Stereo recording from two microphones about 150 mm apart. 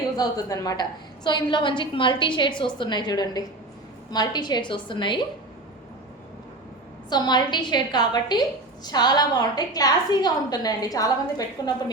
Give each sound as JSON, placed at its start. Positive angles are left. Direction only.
{"t": 0.2, "sound": "a woman's voice", "side_deg": 25}
{"t": 7.1, "sound": "a woman's voice", "side_deg": 30}